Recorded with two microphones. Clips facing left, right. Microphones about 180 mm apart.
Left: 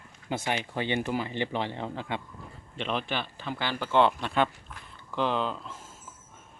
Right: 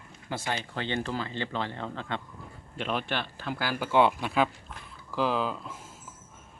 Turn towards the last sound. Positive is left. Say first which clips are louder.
# even
turn(degrees=-5)  # may be behind; listen again after turning